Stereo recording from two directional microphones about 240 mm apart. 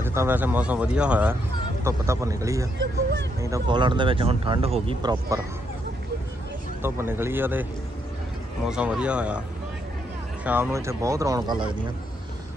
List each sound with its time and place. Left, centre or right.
0.0 s speech: centre
2.8 s speech: right
3.3 s speech: centre
6.8 s speech: centre
8.6 s speech: centre
10.4 s speech: centre